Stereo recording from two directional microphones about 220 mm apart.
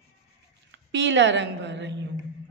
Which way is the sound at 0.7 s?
55° right (ahead or behind).